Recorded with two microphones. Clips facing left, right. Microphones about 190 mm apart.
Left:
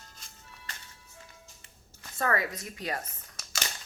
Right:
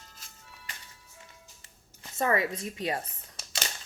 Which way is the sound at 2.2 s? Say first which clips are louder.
Right 3 dB; 25° right (ahead or behind).